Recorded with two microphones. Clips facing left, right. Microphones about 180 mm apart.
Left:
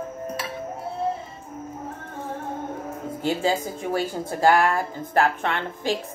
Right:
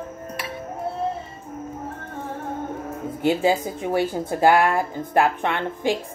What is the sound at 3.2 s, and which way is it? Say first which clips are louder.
A woman's voice: right 4 dB; 15° right (ahead or behind).